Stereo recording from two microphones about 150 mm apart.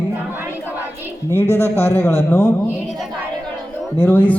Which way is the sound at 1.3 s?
15° right (ahead or behind).